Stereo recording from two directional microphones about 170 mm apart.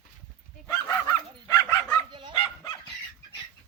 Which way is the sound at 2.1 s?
30° right (ahead or behind).